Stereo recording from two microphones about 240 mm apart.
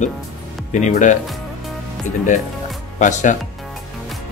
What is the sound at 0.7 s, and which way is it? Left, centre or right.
Speech, left.